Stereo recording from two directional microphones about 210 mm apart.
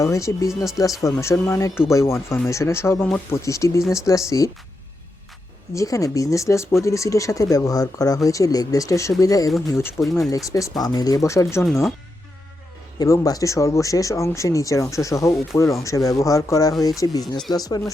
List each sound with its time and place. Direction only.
0.0 s speech: 15° left (ahead or behind)
5.7 s speech: 15° left (ahead or behind)
13.0 s speech: 15° left (ahead or behind)